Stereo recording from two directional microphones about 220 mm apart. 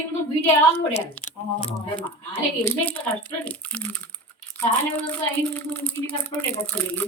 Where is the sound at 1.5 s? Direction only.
5° left (ahead or behind).